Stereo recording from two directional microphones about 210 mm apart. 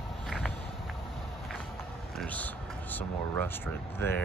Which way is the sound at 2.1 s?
5° left (ahead or behind).